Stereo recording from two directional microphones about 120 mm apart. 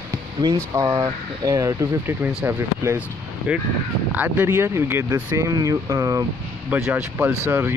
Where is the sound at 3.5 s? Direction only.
10° right (ahead or behind); by 6.3 s 30° right (ahead or behind).